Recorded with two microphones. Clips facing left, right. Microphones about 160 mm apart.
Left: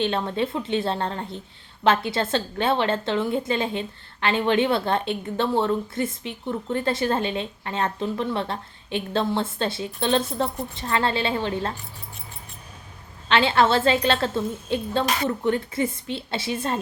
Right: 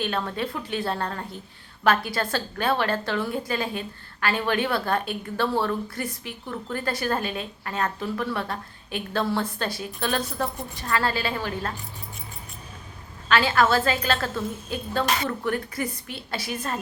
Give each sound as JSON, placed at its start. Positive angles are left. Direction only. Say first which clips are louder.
{"t": 0.0, "sound": "a woman's voice", "louder": "left 4 dB", "side_deg": 25}
{"t": 13.2, "sound": "a woman's voice", "louder": "left 2 dB", "side_deg": 25}